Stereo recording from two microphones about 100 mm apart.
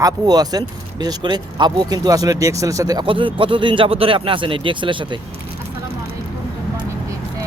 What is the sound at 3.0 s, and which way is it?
Speech, 60° right (ahead or behind).